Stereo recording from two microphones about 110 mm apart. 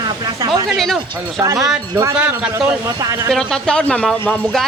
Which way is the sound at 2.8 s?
30° right (ahead or behind).